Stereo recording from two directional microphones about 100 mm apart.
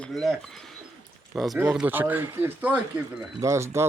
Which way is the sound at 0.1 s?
Centre (ahead or behind).